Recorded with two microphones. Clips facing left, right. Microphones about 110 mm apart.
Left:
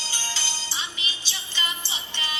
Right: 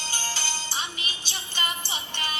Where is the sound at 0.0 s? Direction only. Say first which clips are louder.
Right 2 dB; 50° right (ahead or behind).